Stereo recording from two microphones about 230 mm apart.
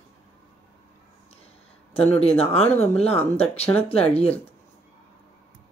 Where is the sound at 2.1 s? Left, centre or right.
Left.